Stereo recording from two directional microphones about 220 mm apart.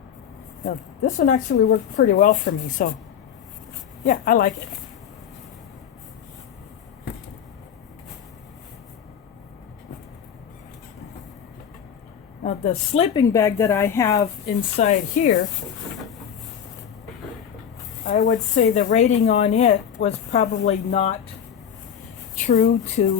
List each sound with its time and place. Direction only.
0.6 s speech: 35° left (ahead or behind)
4.0 s speech: 35° left (ahead or behind)
12.4 s a woman's voice: 30° left (ahead or behind)
13.1 s speech: 15° left (ahead or behind)
14.8 s speech: 35° left (ahead or behind)
18.0 s speech: 35° left (ahead or behind)
22.4 s speech: 35° left (ahead or behind)